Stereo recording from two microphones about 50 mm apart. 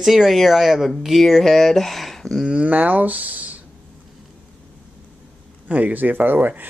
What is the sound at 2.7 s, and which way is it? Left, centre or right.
Speech, right.